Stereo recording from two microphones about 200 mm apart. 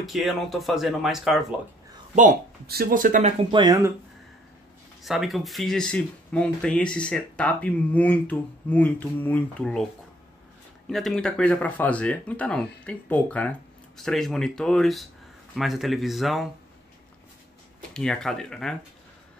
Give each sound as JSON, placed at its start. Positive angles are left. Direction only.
{"t": 0.0, "sound": "speech", "side_deg": 0}
{"t": 2.1, "sound": "speech", "side_deg": -45}
{"t": 3.5, "sound": "speech", "side_deg": -20}
{"t": 5.0, "sound": "speech", "side_deg": 0}
{"t": 10.9, "sound": "speech", "side_deg": 0}
{"t": 17.9, "sound": "speech", "side_deg": 5}